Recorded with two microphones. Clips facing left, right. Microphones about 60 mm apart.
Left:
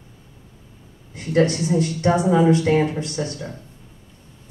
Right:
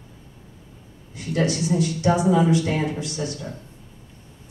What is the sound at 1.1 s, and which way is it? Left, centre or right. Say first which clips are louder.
Speech: left 5 dB; left.